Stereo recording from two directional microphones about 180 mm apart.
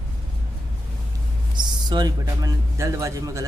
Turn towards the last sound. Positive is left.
turn(degrees=-15)  # may be behind; listen again after turning